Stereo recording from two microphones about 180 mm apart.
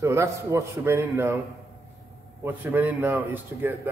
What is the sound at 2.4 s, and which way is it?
A man's voice, 10° right (ahead or behind).